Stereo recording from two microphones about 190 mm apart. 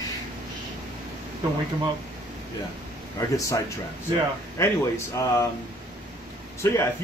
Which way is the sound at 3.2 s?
15° left (ahead or behind).